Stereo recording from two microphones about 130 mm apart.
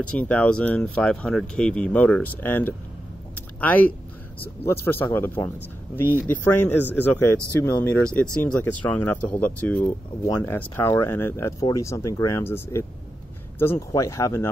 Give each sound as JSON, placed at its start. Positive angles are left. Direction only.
{"t": 0.1, "sound": "speech", "side_deg": 10}
{"t": 3.3, "sound": "a sound", "side_deg": 15}
{"t": 4.6, "sound": "speech", "side_deg": 20}